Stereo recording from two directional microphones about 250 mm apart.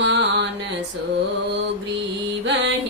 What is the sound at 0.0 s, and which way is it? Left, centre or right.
Music, right.